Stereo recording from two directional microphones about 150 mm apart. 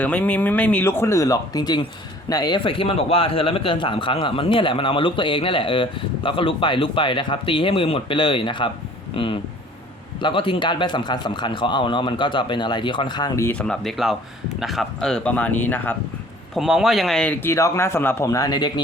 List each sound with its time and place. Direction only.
0.0 s a man's voice: 10° left (ahead or behind)
13.5 s a man's voice: 5° left (ahead or behind)
16.6 s a man's voice: centre (ahead or behind); by 18.7 s 25° left (ahead or behind)